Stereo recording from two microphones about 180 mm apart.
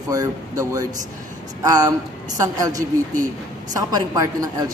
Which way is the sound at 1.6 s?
20° right (ahead or behind).